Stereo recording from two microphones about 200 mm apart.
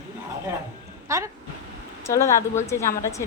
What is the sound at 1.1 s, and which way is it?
Speech, 15° right (ahead or behind).